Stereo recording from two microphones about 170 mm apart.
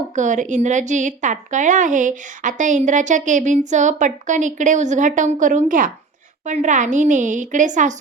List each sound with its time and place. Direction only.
0.2 s a woman's voice: 45° right (ahead or behind)